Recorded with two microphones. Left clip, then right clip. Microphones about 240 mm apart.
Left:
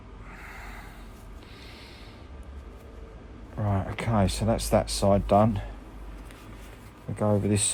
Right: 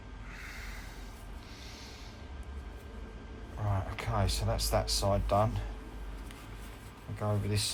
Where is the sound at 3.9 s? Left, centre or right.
Left.